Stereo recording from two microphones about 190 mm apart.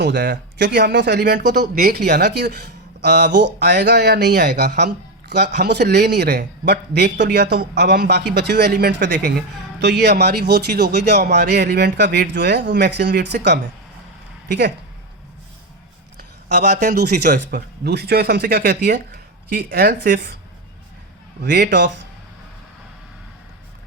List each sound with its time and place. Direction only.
0.0 s speech: 60° right (ahead or behind)
16.5 s speech: 40° right (ahead or behind)
16.9 s speech: 60° right (ahead or behind)
17.2 s speech: 45° right (ahead or behind)
17.8 s speech: 55° right (ahead or behind)
21.4 s speech: 60° right (ahead or behind)